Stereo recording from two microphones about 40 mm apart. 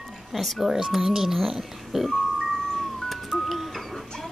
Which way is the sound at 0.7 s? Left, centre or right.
Centre.